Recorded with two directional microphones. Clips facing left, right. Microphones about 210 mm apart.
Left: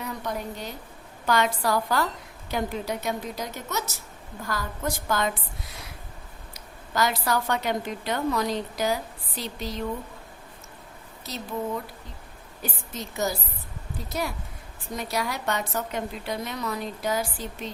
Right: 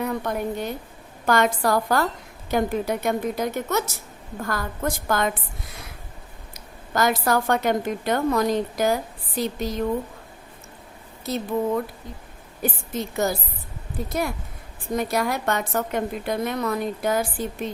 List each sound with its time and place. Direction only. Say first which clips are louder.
0.0 s a woman's voice: right 6 dB; 55° right (ahead or behind)
6.5 s a woman's voice: right 4 dB; 50° right (ahead or behind)
11.3 s a woman's voice: right 9 dB; 55° right (ahead or behind)
12.6 s a woman's voice: right 8 dB; 55° right (ahead or behind)